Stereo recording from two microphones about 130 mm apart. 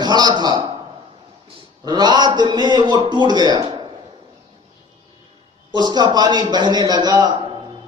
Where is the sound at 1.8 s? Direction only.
30° right (ahead or behind).